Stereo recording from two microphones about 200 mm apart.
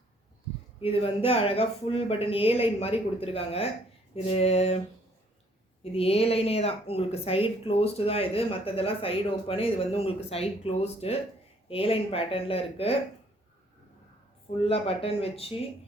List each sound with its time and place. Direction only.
0.8 s speech: 30° left (ahead or behind)
4.1 s a sound: 30° left (ahead or behind)
5.8 s speech: 30° left (ahead or behind)
14.6 s speech: 30° left (ahead or behind)